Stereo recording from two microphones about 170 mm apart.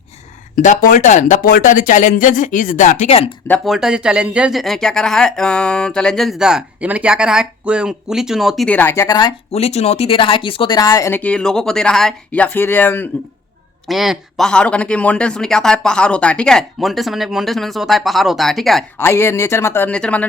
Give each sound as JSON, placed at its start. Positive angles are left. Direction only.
{"t": 0.6, "sound": "speech", "side_deg": 50}
{"t": 3.6, "sound": "speech", "side_deg": 0}
{"t": 9.5, "sound": "speech", "side_deg": 40}
{"t": 13.8, "sound": "speech", "side_deg": 0}
{"t": 18.9, "sound": "speech", "side_deg": 15}